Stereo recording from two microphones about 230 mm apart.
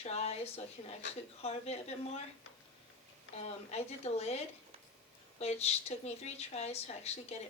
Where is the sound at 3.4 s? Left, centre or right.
Left.